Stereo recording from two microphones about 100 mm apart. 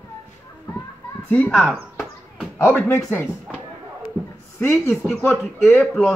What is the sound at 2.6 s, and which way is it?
Speech, 30° left (ahead or behind).